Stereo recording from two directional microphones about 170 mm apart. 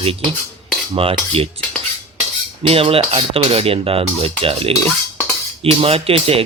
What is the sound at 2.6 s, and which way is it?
Speech, 35° right (ahead or behind).